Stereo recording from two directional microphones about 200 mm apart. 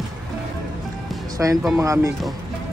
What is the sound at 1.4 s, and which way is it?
Speech, 10° right (ahead or behind).